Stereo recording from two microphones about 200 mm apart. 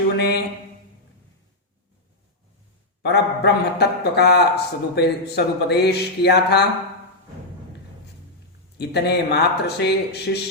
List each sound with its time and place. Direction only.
0.2 s a sound: 55° left (ahead or behind)
3.0 s a man's voice: 60° left (ahead or behind)
8.8 s a man's voice: 55° left (ahead or behind)